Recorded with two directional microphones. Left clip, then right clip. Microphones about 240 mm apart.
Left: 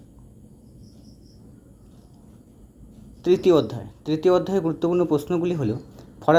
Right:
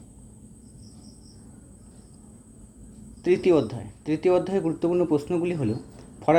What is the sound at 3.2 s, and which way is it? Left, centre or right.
Speech, centre.